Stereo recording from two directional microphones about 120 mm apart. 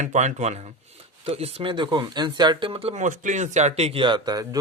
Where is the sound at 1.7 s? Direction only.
40° right (ahead or behind).